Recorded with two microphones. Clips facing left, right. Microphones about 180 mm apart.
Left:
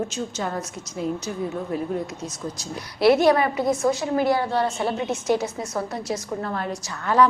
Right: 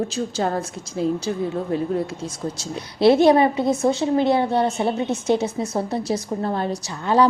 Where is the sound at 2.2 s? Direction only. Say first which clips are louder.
Right 3 dB; 25° right (ahead or behind).